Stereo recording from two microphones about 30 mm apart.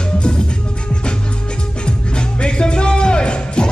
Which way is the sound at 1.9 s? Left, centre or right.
Left.